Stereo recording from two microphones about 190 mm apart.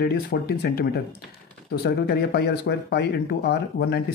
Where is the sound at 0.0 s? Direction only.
55° left (ahead or behind).